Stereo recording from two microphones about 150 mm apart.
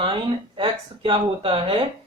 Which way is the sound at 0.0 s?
35° right (ahead or behind).